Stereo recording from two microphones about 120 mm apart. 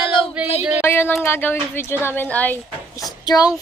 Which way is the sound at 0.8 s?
20° left (ahead or behind).